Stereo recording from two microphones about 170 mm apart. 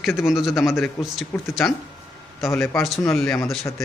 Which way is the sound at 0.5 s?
15° left (ahead or behind).